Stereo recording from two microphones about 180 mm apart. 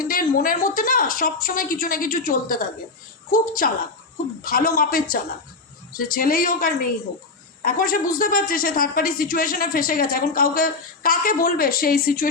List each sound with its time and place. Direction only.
0.0 s speech: 50° left (ahead or behind)